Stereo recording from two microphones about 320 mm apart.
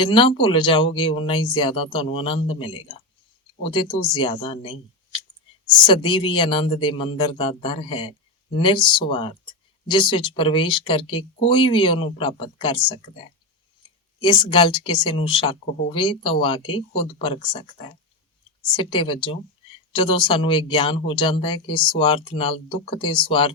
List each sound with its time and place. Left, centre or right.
0.0 s speech: centre
13.8 s clicking: centre
14.2 s speech: centre